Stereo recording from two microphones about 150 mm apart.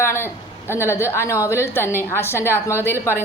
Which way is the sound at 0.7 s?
15° left (ahead or behind).